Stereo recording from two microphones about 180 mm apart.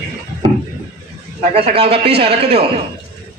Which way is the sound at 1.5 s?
35° right (ahead or behind).